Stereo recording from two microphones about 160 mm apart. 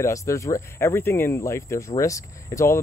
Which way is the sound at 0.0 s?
20° left (ahead or behind).